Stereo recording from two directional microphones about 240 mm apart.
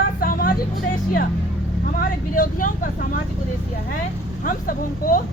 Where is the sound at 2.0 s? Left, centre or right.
Left.